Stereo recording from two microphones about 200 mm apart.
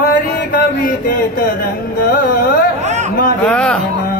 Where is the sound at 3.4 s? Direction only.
5° left (ahead or behind).